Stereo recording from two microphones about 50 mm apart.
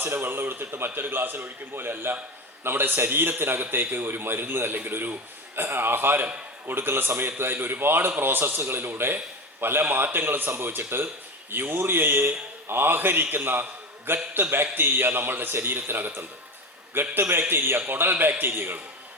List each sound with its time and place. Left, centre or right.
0.1 s a man's voice: right